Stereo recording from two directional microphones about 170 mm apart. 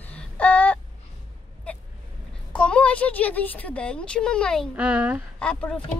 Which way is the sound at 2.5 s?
5° left (ahead or behind).